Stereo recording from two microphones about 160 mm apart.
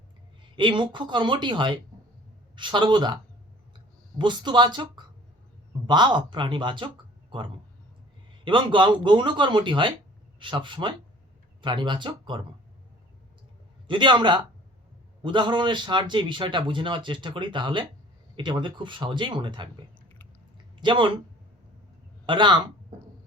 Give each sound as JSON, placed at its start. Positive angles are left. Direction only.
{"t": 0.5, "sound": "a man's voice", "side_deg": -30}
{"t": 4.2, "sound": "a man's voice", "side_deg": -30}
{"t": 13.8, "sound": "a man's voice", "side_deg": -30}
{"t": 20.8, "sound": "a man's voice", "side_deg": -30}
{"t": 22.3, "sound": "speech", "side_deg": -30}